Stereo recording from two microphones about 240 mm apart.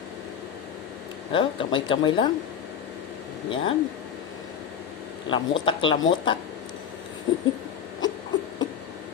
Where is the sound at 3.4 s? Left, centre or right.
Left.